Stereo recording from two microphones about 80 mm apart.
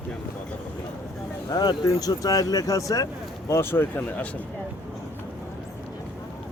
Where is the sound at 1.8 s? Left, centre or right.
Left.